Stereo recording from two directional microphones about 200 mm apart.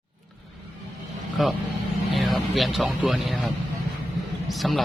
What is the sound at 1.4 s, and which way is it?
Speech, centre (ahead or behind).